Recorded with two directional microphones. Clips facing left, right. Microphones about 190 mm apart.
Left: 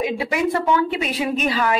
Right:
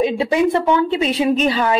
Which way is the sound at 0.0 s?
25° right (ahead or behind).